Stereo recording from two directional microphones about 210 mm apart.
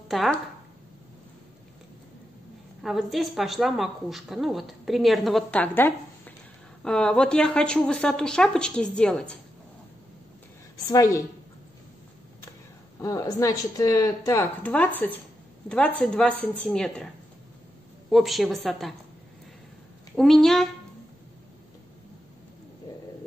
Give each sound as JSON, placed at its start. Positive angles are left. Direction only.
{"t": 0.1, "sound": "speech", "side_deg": 0}
{"t": 2.8, "sound": "speech", "side_deg": 0}
{"t": 10.9, "sound": "speech", "side_deg": 15}
{"t": 13.0, "sound": "speech", "side_deg": 15}
{"t": 16.0, "sound": "speech", "side_deg": 5}
{"t": 18.1, "sound": "speech", "side_deg": 0}
{"t": 20.2, "sound": "speech", "side_deg": 0}